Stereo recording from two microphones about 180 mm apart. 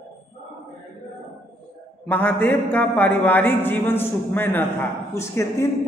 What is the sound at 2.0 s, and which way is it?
A woman's voice, 10° left (ahead or behind).